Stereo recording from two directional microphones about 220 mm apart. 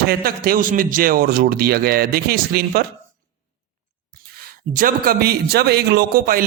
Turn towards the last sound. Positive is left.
turn(degrees=-40)  # may be behind; listen again after turning